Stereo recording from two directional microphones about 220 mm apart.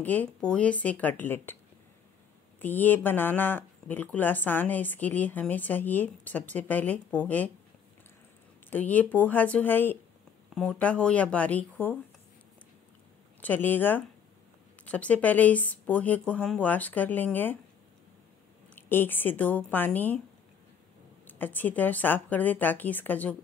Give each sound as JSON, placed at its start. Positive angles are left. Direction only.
{"t": 0.0, "sound": "speech", "side_deg": 10}
{"t": 2.6, "sound": "speech", "side_deg": 10}
{"t": 8.6, "sound": "speech", "side_deg": 5}
{"t": 13.4, "sound": "speech", "side_deg": 10}
{"t": 18.8, "sound": "speech", "side_deg": 10}
{"t": 21.3, "sound": "speech", "side_deg": 10}